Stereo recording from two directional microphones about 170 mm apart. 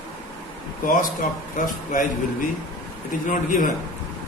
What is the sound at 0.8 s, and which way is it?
Speech, 55° left (ahead or behind).